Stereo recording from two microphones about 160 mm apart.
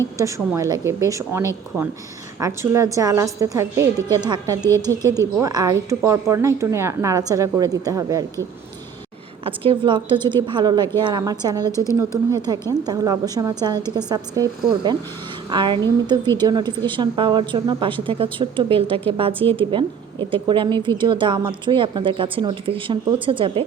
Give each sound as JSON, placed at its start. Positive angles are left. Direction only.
{"t": 0.2, "sound": "a woman's voice", "side_deg": -20}
{"t": 9.4, "sound": "a woman's voice", "side_deg": -35}